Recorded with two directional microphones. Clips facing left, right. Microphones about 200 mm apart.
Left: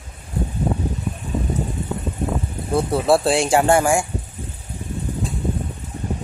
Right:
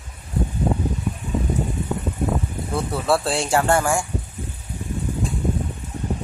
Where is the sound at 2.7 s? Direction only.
20° left (ahead or behind).